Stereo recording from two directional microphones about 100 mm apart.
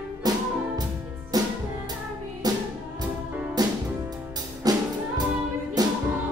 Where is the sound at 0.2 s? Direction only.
40° right (ahead or behind).